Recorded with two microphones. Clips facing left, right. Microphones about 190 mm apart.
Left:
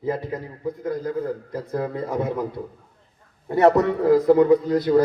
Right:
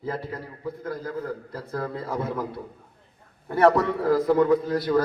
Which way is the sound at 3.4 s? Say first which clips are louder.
Left 3 dB; 20° left (ahead or behind).